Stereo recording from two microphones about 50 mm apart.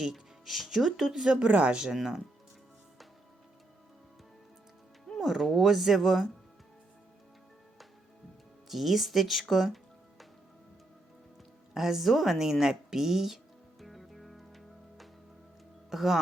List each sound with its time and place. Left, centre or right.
0.0 s speech: centre
1.3 s speech: right
2.0 s speech: centre
5.2 s speech: centre
8.7 s speech: centre
11.7 s music: centre
15.9 s speech: centre